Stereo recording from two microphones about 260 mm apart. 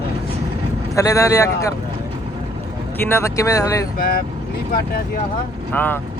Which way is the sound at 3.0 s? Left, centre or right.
Centre.